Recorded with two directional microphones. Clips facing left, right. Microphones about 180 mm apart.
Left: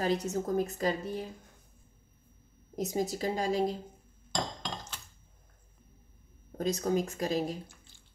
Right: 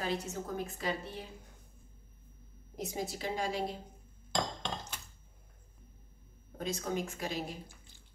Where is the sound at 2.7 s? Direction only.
40° left (ahead or behind).